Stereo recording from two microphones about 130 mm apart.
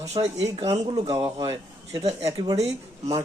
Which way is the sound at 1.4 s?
25° right (ahead or behind).